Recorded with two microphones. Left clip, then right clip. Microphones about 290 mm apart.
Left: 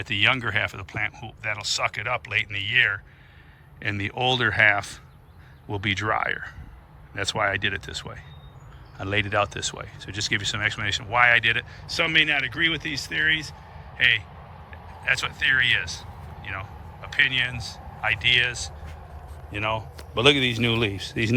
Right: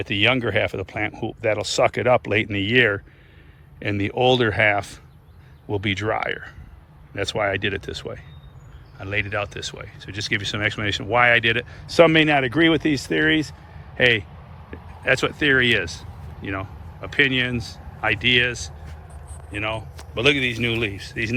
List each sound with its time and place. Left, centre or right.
0.0 s speech: centre
19.5 s a man's voice: centre